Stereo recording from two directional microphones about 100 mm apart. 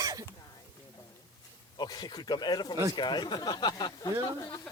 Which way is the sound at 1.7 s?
45° left (ahead or behind).